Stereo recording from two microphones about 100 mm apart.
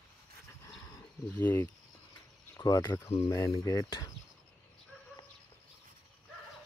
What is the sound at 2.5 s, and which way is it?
Speech, 30° left (ahead or behind).